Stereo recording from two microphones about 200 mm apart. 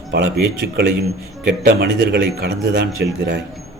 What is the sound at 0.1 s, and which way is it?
Speech, 55° right (ahead or behind).